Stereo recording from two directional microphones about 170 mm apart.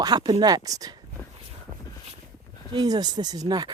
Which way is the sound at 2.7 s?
25° right (ahead or behind).